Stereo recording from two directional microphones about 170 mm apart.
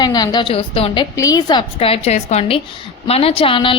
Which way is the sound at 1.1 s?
20° left (ahead or behind).